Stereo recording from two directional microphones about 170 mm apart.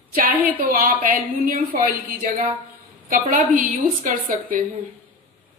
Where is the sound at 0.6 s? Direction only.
55° right (ahead or behind).